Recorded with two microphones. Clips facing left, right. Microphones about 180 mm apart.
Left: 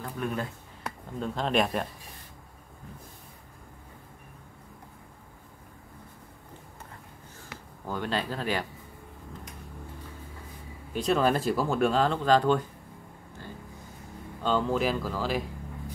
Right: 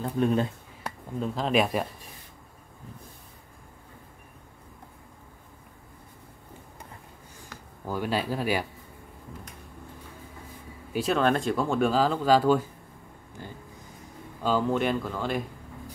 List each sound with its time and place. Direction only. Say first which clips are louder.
0.0 s speech: right 7 dB; 25° right (ahead or behind)
1.2 s speech: right 2 dB; centre (ahead or behind)
7.8 s speech: right 2 dB; 10° right (ahead or behind)
10.9 s speech: right 1 dB; 5° right (ahead or behind)
13.4 s speech: right 2 dB; 15° right (ahead or behind)
14.4 s speech: right 1 dB; 5° right (ahead or behind)